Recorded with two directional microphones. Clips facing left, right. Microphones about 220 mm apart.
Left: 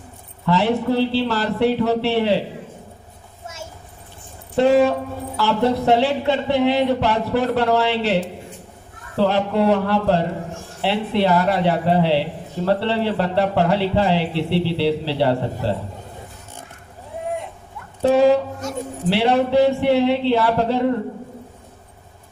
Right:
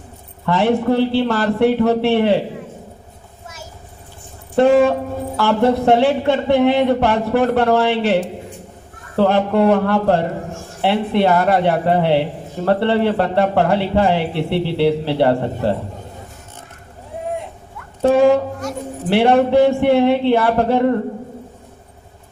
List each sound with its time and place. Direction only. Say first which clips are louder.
0.4 s a man's voice: right 3 dB; 55° right (ahead or behind)
3.4 s vehicle: left 2 dB; 25° left (ahead or behind)
4.5 s a man's voice: right 3 dB; 50° right (ahead or behind)
18.0 s a man's voice: right 2 dB; 50° right (ahead or behind)